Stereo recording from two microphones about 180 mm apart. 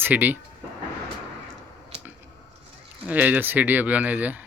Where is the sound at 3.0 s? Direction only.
10° right (ahead or behind).